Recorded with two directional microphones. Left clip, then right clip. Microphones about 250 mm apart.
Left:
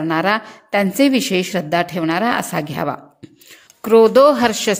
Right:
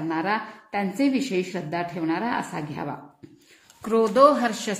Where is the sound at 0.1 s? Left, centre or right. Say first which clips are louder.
Left 8 dB; left.